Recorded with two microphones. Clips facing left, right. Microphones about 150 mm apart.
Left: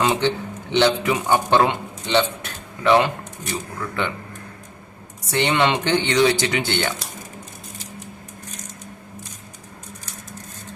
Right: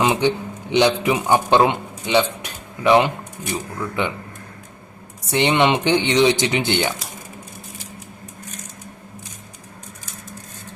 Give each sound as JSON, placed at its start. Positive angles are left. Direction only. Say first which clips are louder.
{"t": 0.0, "sound": "a man's voice", "louder": "right 2 dB", "side_deg": -15}
{"t": 5.3, "sound": "speech", "louder": "right 2 dB", "side_deg": -20}